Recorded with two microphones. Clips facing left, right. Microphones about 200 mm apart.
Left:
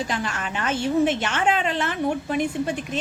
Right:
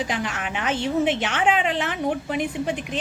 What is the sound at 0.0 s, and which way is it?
A woman's voice, 15° right (ahead or behind).